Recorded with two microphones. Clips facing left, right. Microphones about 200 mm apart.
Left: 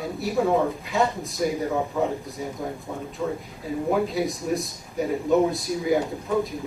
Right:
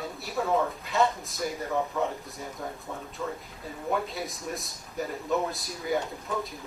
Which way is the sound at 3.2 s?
15° left (ahead or behind).